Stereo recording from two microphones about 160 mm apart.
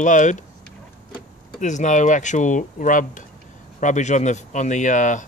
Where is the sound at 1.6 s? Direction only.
50° left (ahead or behind).